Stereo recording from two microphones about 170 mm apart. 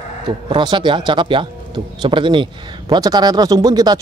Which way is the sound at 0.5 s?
30° right (ahead or behind).